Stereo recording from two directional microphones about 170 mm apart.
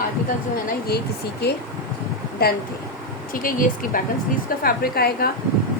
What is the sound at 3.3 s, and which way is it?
Speech, 55° left (ahead or behind).